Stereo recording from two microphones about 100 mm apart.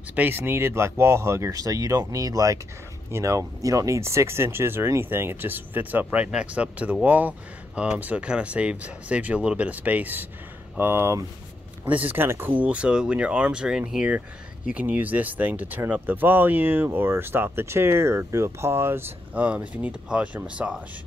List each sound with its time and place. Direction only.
0.1 s speech: 20° right (ahead or behind)